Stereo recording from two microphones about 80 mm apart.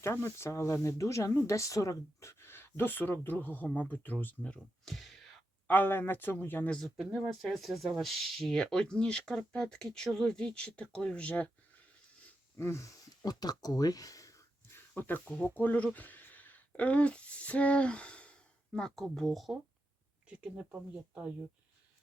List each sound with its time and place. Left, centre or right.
0.0 s speech: left
4.9 s a sound: centre
5.6 s speech: left
6.7 s speech: centre
12.5 s speech: left
13.2 s speech: left
14.7 s a sound: left
15.2 s speech: centre
20.2 s speech: centre